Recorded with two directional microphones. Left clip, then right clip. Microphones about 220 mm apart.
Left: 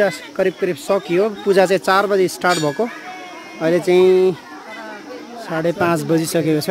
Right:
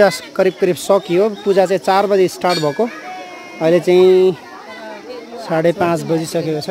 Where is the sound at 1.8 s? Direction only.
15° right (ahead or behind).